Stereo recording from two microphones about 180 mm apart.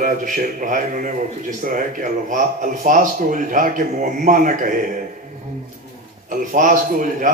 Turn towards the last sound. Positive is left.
turn(degrees=-45)  # may be behind; listen again after turning